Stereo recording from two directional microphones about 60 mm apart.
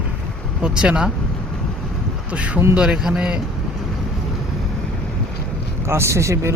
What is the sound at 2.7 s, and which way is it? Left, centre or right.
Speech, centre.